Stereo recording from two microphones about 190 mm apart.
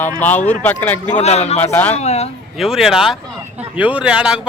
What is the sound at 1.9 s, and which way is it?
Speech, 35° left (ahead or behind).